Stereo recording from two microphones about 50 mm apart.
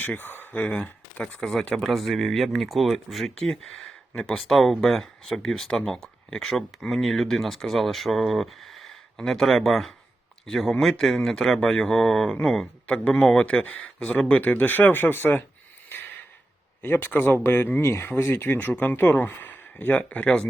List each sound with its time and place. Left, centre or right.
0.0 s speech: left
1.4 s speech: centre
3.4 s speech: centre
12.9 s speech: left
16.8 s speech: left